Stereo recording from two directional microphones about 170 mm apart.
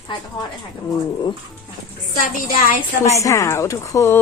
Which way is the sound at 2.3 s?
55° left (ahead or behind).